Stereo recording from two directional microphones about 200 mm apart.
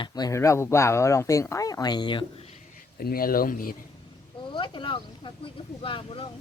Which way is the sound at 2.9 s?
50° left (ahead or behind).